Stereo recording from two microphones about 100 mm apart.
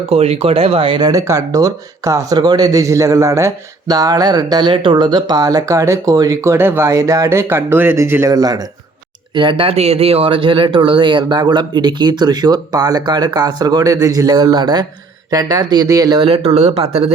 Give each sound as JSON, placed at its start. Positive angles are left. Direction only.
{"t": 0.1, "sound": "speech", "side_deg": -90}
{"t": 0.9, "sound": "speech", "side_deg": -45}
{"t": 1.3, "sound": "speech", "side_deg": -35}
{"t": 8.3, "sound": "speech", "side_deg": -40}
{"t": 9.3, "sound": "speech", "side_deg": -50}
{"t": 9.6, "sound": "speech", "side_deg": -90}
{"t": 16.2, "sound": "speech", "side_deg": -75}